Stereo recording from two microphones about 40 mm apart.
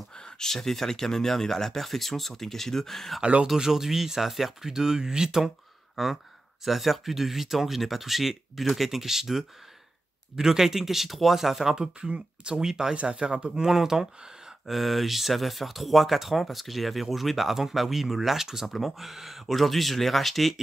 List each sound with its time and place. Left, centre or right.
0.4 s speech: centre
3.2 s speech: right
3.5 s speech: centre
6.0 s speech: centre
11.7 s speech: centre
12.9 s speech: right
13.7 s speech: centre
18.7 s speech: centre